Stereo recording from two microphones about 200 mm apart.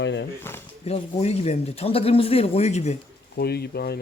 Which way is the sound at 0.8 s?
30° left (ahead or behind).